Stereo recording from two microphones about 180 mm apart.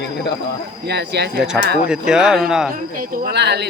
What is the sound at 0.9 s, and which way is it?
Speech, 65° right (ahead or behind).